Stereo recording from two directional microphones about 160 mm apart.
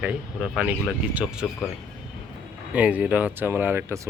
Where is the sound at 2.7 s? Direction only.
10° right (ahead or behind).